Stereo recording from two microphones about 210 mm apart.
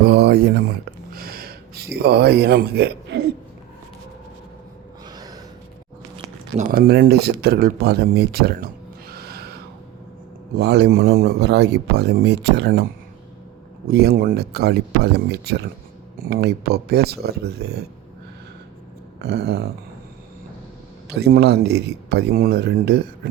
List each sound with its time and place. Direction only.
0.0 s a sound: 50° right (ahead or behind)
5.0 s gasp: 20° right (ahead or behind)
6.1 s speech: 40° right (ahead or behind)
10.5 s a man's voice: 50° right (ahead or behind)
13.8 s a man's voice: 50° right (ahead or behind)
19.2 s a man's voice: 50° right (ahead or behind)
21.1 s a man's voice: 50° right (ahead or behind)